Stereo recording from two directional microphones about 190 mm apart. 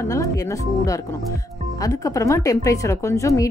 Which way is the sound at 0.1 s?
15° left (ahead or behind).